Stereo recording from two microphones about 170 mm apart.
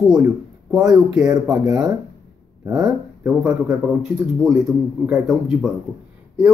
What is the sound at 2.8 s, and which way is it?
A man's voice, 5° right (ahead or behind).